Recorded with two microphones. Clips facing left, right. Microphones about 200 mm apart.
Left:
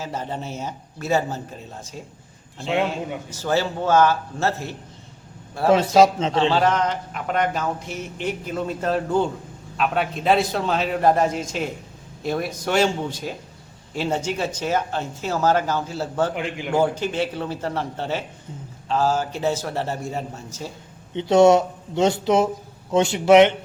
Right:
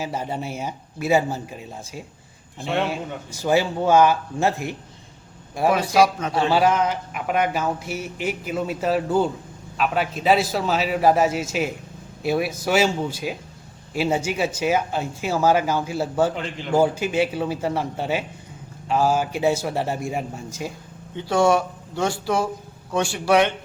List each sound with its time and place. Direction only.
0.0 s speech: 10° right (ahead or behind)
3.2 s speech: 10° right (ahead or behind)
5.9 s speech: 25° left (ahead or behind)
6.5 s a man's voice: 10° right (ahead or behind)
16.3 s a man's voice: 15° left (ahead or behind)
16.7 s speech: 10° right (ahead or behind)
21.2 s speech: 20° left (ahead or behind)